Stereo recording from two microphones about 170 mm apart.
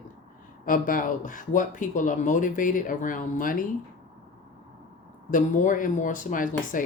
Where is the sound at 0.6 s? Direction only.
55° left (ahead or behind).